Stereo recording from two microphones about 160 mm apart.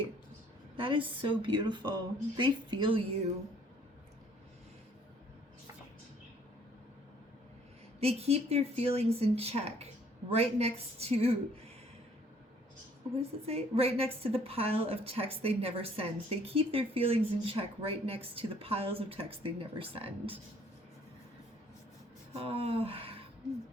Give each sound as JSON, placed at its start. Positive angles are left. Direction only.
{"t": 0.8, "sound": "a woman's voice", "side_deg": -30}
{"t": 7.9, "sound": "a woman's voice", "side_deg": -40}
{"t": 13.1, "sound": "a woman's voice", "side_deg": -40}
{"t": 22.4, "sound": "a woman's voice", "side_deg": -40}